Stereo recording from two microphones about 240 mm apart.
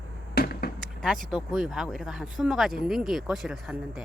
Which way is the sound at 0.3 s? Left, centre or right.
Left.